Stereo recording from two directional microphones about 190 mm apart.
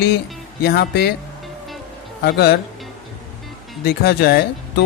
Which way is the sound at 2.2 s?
55° left (ahead or behind).